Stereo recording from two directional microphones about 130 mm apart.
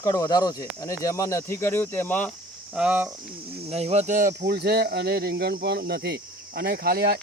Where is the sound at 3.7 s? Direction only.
55° right (ahead or behind); by 4.3 s 80° right.